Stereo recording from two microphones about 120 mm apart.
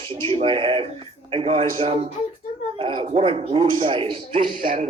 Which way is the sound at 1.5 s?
85° right.